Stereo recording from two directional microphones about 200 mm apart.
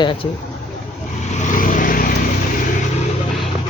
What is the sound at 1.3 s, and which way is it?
Vehicle, 40° left (ahead or behind).